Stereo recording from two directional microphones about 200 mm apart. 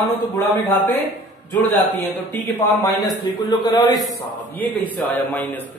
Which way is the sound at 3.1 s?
20° left (ahead or behind).